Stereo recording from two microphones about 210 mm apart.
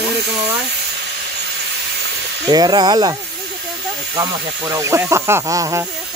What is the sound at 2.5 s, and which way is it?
Speech, 20° right (ahead or behind).